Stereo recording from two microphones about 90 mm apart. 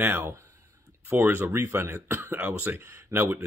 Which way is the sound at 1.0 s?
20° right (ahead or behind).